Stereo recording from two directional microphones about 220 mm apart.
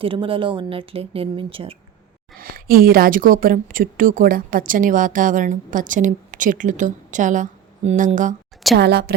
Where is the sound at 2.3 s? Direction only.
40° right (ahead or behind).